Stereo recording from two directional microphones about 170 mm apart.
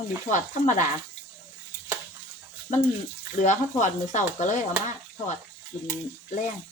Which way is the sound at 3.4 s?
45° left (ahead or behind).